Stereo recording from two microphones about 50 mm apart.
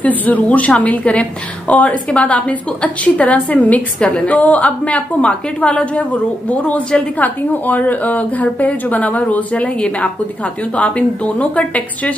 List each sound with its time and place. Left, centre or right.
0.0 s a woman's voice: left